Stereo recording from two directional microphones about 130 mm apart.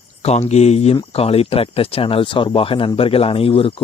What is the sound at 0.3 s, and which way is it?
Speech, 55° left (ahead or behind).